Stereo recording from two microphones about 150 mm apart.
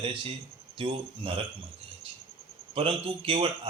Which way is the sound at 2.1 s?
35° right (ahead or behind).